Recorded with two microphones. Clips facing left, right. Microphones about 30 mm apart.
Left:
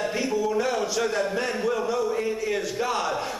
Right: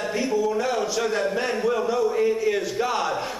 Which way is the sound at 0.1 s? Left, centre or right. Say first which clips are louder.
Right 2 dB; centre.